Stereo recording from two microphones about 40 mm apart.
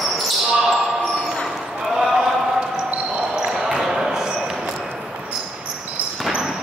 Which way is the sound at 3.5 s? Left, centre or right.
Centre.